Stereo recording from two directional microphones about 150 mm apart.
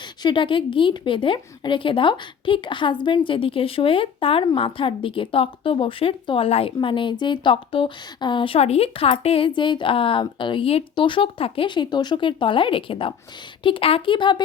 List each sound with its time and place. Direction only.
0.2 s speech: 30° left (ahead or behind)